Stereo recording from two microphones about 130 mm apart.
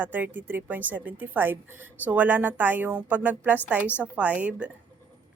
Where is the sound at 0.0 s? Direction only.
15° right (ahead or behind).